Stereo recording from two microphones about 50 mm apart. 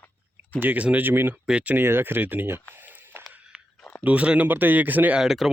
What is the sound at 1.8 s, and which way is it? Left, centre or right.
Speech, right.